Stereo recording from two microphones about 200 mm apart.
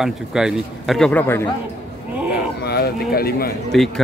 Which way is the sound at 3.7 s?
Centre (ahead or behind).